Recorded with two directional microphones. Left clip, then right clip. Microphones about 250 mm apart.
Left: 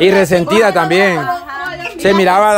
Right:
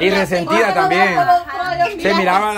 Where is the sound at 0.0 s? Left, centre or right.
Left.